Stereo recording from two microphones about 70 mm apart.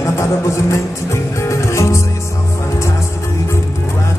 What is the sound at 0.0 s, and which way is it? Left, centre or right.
Music, left.